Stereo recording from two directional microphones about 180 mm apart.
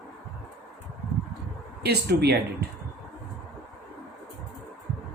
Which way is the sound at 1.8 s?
60° right (ahead or behind).